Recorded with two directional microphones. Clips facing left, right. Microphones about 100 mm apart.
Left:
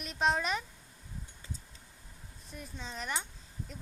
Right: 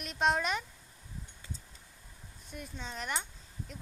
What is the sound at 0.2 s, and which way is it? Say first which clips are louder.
Speech: right 1 dB; centre (ahead or behind).